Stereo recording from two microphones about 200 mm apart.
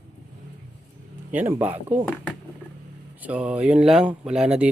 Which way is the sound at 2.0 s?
5° left (ahead or behind).